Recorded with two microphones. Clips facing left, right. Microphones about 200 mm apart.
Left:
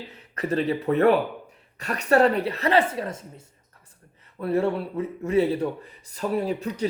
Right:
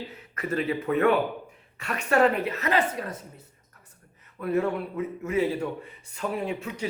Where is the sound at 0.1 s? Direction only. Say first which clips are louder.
Left 7 dB; 35° left (ahead or behind).